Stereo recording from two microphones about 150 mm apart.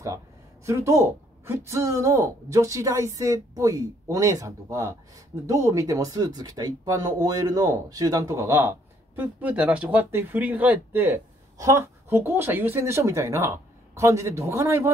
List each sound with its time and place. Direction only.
0.7 s speech: 20° right (ahead or behind)